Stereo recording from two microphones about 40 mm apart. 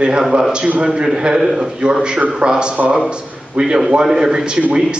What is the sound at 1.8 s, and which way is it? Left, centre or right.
A man's voice, right.